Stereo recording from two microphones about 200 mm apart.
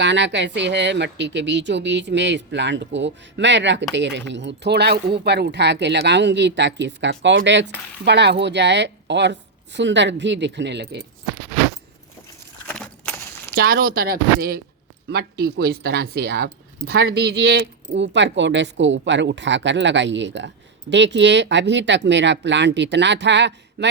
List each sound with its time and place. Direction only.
0.0 s speech: 60° right (ahead or behind)
12.6 s a sound: 5° left (ahead or behind)
13.6 s speech: 50° right (ahead or behind)
17.0 s speech: 65° right (ahead or behind)